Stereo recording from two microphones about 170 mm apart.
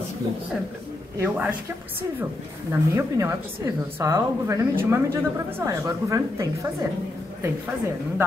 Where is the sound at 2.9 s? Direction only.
15° right (ahead or behind).